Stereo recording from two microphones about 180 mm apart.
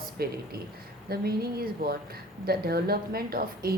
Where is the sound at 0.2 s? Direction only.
60° right (ahead or behind).